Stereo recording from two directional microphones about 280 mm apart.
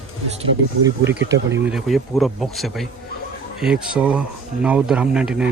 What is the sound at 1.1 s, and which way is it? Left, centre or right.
Speech, right.